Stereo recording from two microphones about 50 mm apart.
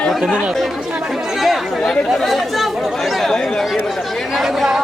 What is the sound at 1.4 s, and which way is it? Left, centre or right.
Chatter, centre.